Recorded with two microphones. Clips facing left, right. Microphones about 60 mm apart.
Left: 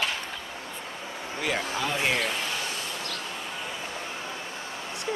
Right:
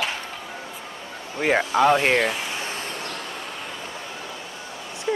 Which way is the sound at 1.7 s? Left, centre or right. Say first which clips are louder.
Right 10 dB; right.